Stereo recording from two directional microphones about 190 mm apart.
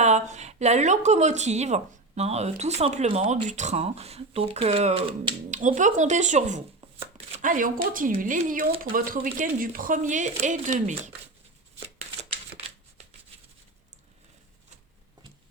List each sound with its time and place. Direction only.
0.0 s a woman's voice: 35° right (ahead or behind)